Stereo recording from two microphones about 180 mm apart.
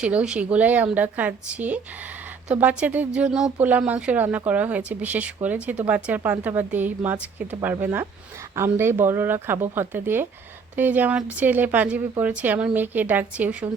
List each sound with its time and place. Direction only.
0.0 s speech: 5° right (ahead or behind)